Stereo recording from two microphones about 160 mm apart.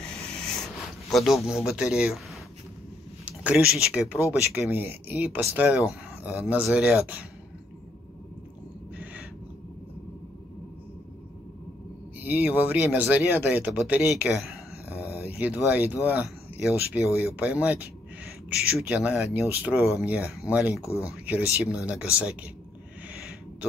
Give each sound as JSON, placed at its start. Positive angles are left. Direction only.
{"t": 0.0, "sound": "a sound", "side_deg": 5}
{"t": 1.1, "sound": "speech", "side_deg": 0}
{"t": 3.3, "sound": "speech", "side_deg": -5}
{"t": 12.2, "sound": "speech", "side_deg": -10}
{"t": 20.8, "sound": "speech", "side_deg": 15}
{"t": 21.6, "sound": "speech", "side_deg": -5}